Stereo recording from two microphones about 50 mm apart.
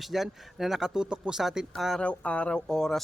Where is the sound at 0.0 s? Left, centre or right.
Centre.